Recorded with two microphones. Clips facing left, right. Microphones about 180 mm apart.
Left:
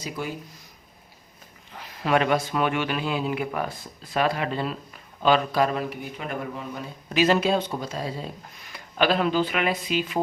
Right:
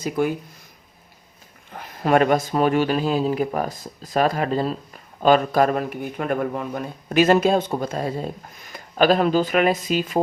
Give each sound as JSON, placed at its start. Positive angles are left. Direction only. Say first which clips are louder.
{"t": 0.2, "sound": "speech", "louder": "right 11 dB", "side_deg": -55}
{"t": 1.7, "sound": "speech", "louder": "right 5 dB", "side_deg": -50}